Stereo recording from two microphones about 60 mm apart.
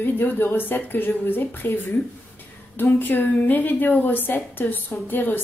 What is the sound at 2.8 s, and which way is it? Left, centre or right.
A woman's voice, left.